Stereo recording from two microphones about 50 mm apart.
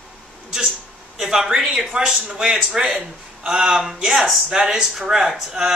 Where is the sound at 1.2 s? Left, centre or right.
Centre.